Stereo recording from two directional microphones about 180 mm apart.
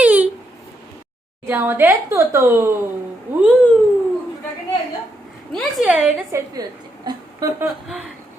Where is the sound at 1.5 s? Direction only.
10° right (ahead or behind).